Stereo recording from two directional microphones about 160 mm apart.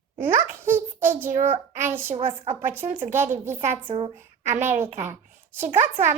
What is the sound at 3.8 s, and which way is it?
Speech, 35° right (ahead or behind).